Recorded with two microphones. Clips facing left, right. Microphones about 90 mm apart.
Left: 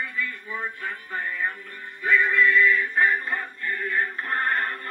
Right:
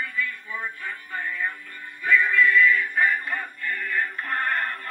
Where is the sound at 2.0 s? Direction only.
20° left (ahead or behind).